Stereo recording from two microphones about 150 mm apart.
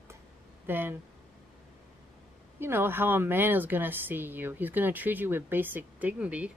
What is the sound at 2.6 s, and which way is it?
Speech, 15° right (ahead or behind).